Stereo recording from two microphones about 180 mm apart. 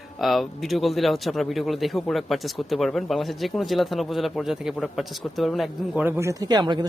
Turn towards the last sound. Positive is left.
turn(degrees=-25)  # may be behind; listen again after turning